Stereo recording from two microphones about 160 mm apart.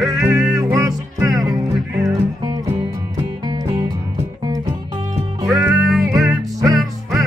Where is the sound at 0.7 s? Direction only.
20° right (ahead or behind).